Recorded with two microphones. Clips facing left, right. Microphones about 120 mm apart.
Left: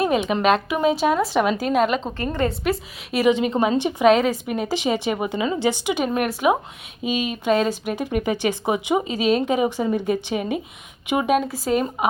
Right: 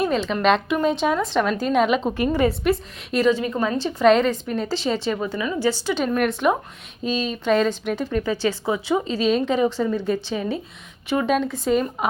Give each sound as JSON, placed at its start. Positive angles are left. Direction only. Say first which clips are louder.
{"t": 0.1, "sound": "a woman's voice", "louder": "left 1 dB", "side_deg": 15}
{"t": 2.1, "sound": "a woman's voice", "louder": "right 3 dB", "side_deg": -10}
{"t": 3.2, "sound": "speech", "louder": "left 4 dB", "side_deg": 20}